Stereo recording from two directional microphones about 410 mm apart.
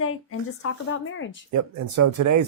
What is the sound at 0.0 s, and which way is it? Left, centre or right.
Speech, left.